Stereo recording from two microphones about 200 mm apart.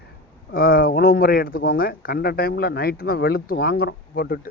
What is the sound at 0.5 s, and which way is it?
Speech, 45° left (ahead or behind).